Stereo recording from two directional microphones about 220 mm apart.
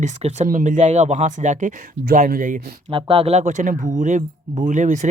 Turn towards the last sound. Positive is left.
turn(degrees=-35)  # may be behind; listen again after turning